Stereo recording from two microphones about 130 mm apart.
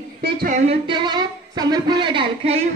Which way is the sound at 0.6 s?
40° right (ahead or behind).